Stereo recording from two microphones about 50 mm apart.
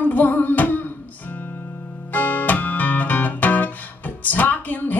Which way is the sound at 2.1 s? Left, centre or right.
Left.